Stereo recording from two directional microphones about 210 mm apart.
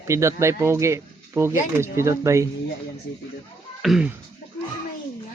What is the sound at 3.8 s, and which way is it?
Speech, 5° right (ahead or behind).